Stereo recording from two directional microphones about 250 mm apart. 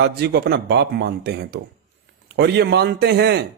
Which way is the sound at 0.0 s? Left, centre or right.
Right.